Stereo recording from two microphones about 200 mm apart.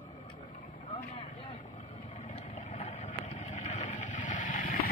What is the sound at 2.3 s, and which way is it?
Vehicle, 35° left (ahead or behind).